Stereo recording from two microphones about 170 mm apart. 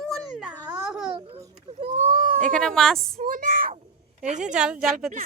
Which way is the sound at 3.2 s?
55° right (ahead or behind).